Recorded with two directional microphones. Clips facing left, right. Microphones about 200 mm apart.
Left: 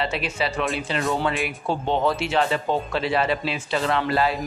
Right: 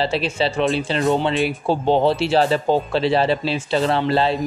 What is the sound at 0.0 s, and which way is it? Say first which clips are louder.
Speech: right 5 dB; 30° right (ahead or behind).